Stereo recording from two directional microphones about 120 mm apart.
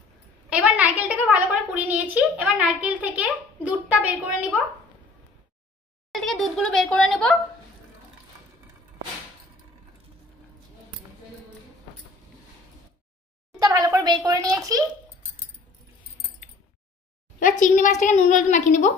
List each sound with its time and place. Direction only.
0.5 s a woman's voice: 10° right (ahead or behind)
6.1 s a woman's voice: centre (ahead or behind)
13.6 s a child's voice: 30° right (ahead or behind)
17.4 s a woman's voice: 90° left